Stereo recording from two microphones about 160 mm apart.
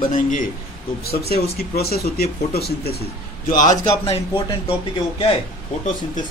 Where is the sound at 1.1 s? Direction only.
75° left (ahead or behind).